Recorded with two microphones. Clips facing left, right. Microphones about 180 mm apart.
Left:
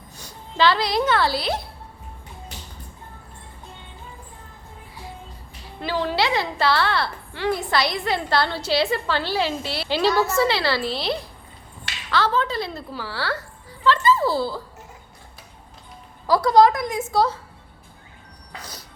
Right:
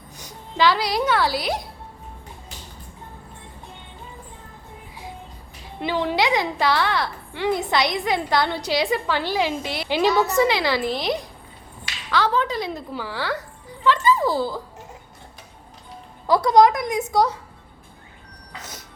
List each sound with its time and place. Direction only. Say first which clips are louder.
0.2 s a woman's voice: even; 15° right (ahead or behind)
5.8 s a woman's voice: right 1 dB; 20° right (ahead or behind)
16.2 s a woman's voice: even; 20° right (ahead or behind)